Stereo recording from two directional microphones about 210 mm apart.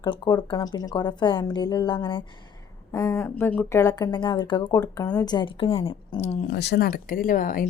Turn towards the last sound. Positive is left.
turn(degrees=40)  # may be behind; listen again after turning